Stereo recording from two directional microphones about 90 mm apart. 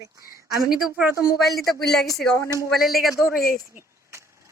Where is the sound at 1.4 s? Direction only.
Centre (ahead or behind).